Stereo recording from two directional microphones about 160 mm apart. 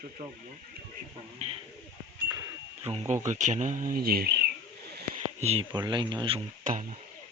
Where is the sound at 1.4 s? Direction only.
40° right (ahead or behind).